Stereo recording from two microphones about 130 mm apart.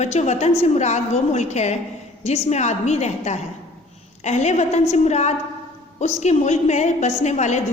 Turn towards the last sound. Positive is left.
turn(degrees=65)  # may be behind; listen again after turning